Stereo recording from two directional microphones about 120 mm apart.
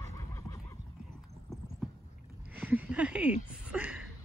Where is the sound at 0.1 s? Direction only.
25° left (ahead or behind).